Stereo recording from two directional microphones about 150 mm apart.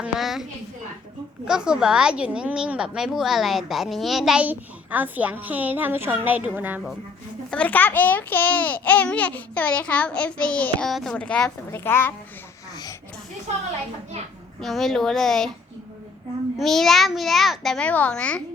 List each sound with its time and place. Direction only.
0.0 s a woman's voice: centre (ahead or behind)
1.5 s speech: 5° right (ahead or behind)
7.5 s a child's voice: 10° left (ahead or behind)
14.6 s a child's voice: centre (ahead or behind)
16.6 s a child's voice: centre (ahead or behind)